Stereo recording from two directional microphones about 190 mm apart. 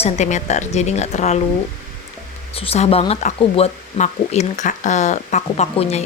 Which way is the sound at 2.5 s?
30° left (ahead or behind).